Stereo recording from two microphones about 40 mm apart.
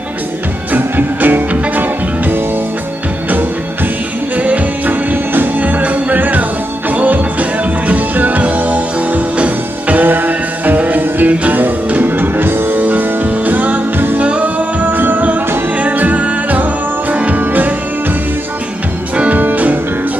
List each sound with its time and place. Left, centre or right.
0.7 s music: right
4.4 s music: right
10.0 s music: right
14.1 s music: right
17.4 s music: right
19.1 s music: right